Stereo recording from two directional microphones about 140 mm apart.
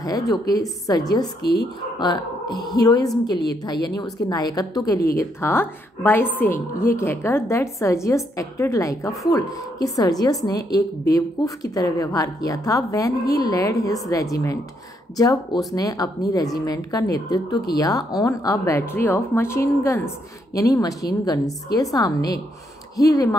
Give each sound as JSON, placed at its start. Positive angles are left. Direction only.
{"t": 0.3, "sound": "a woman's voice", "side_deg": 25}